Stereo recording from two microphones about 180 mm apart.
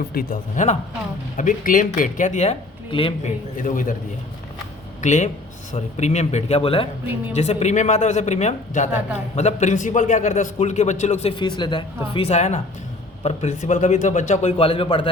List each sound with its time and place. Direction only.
0.1 s speech: 55° left (ahead or behind); by 3.3 s 30° left (ahead or behind)
3.6 s speech: 50° left (ahead or behind)
4.9 s a man's voice: 40° left (ahead or behind)